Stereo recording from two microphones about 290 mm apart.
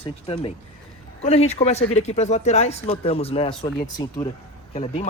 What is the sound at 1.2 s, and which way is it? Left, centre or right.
Speech, left.